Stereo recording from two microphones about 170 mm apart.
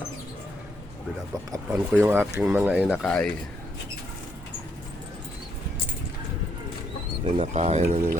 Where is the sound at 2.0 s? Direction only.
15° right (ahead or behind); by 3.3 s centre (ahead or behind).